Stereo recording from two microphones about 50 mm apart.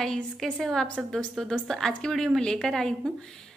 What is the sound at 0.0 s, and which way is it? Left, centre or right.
A woman's voice, centre.